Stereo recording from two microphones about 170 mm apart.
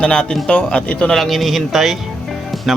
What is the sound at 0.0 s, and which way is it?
A man's voice, 5° left (ahead or behind).